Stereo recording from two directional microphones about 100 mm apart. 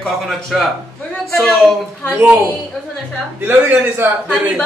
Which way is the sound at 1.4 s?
Centre (ahead or behind).